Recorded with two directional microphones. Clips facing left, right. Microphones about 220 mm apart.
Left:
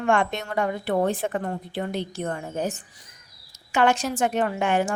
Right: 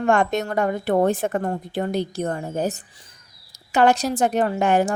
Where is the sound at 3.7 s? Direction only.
35° right (ahead or behind).